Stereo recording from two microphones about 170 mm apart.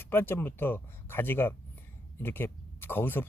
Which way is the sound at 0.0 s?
10° left (ahead or behind).